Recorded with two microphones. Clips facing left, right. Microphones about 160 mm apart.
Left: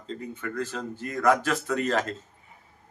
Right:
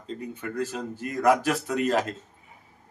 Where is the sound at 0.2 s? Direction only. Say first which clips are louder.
Right 2 dB; 20° right (ahead or behind).